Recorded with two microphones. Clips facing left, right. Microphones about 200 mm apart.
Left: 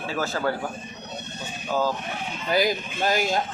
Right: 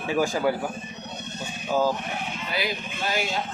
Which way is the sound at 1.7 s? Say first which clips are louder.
Right 2 dB; 15° right (ahead or behind).